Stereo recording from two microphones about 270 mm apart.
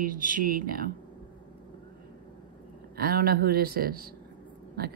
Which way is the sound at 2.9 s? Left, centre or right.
Right.